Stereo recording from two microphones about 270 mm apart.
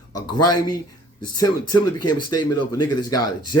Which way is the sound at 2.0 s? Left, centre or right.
Left.